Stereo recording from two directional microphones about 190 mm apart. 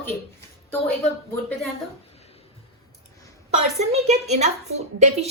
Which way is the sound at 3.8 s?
35° right (ahead or behind).